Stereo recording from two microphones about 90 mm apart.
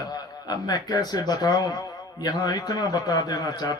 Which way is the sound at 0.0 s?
45° left (ahead or behind).